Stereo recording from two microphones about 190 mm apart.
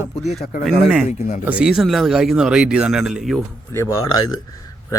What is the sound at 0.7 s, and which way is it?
Speech, centre (ahead or behind).